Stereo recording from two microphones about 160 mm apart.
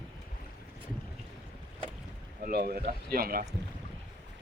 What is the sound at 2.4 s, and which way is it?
Speech, 70° right (ahead or behind).